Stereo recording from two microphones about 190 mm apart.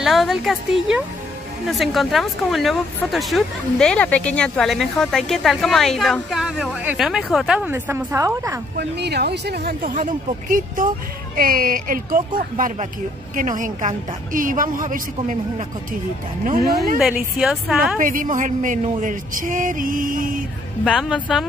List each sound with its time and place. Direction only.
0.0 s speech: centre (ahead or behind)
8.7 s speech: 60° right (ahead or behind)
11.3 s a man's voice: 50° right (ahead or behind)
16.4 s a man's voice: 50° right (ahead or behind)
17.0 s speech: 5° right (ahead or behind)
17.9 s a man's voice: 45° right (ahead or behind)
20.8 s speech: 5° left (ahead or behind)